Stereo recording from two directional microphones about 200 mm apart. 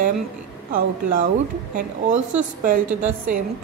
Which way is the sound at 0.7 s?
45° right (ahead or behind).